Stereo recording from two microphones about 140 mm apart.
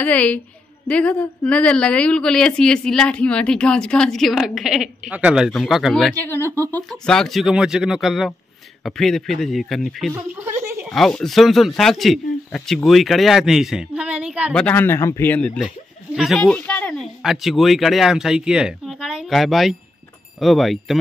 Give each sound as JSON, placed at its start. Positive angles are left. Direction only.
{"t": 0.0, "sound": "a woman's voice", "side_deg": 10}
{"t": 6.1, "sound": "speech", "side_deg": 15}
{"t": 6.8, "sound": "a woman's voice", "side_deg": 5}
{"t": 10.4, "sound": "a sound", "side_deg": -20}
{"t": 10.9, "sound": "a woman's voice", "side_deg": 5}
{"t": 14.5, "sound": "speech", "side_deg": 10}
{"t": 17.2, "sound": "a woman's voice", "side_deg": 0}